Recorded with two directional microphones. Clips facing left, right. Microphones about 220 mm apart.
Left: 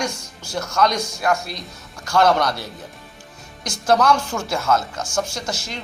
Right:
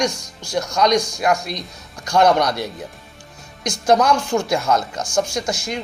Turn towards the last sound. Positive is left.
turn(degrees=-15)  # may be behind; listen again after turning